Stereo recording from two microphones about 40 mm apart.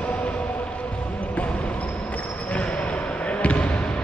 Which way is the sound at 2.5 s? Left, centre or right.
Left.